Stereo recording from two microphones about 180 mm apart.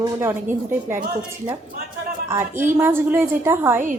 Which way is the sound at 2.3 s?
15° right (ahead or behind).